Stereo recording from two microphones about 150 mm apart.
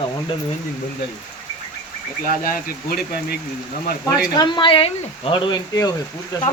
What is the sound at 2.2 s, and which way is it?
Speech, 70° left (ahead or behind).